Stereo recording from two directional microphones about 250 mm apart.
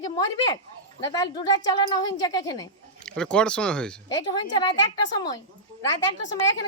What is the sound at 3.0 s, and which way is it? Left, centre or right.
Speech, centre.